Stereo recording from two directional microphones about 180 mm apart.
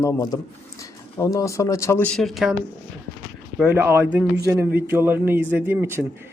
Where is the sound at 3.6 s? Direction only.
10° right (ahead or behind).